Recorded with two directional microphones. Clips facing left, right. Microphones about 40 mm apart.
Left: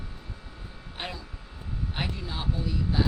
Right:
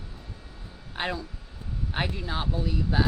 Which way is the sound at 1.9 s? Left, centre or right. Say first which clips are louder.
Right 5 dB; right.